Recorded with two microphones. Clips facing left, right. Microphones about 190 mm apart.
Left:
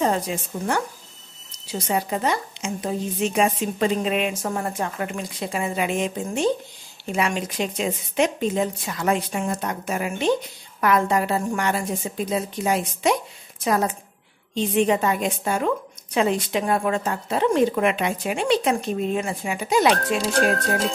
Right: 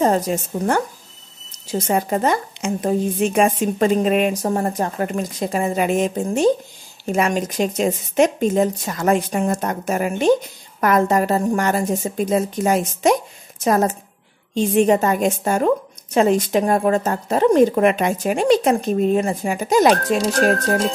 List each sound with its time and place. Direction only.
0.0 s a woman's voice: 45° right (ahead or behind)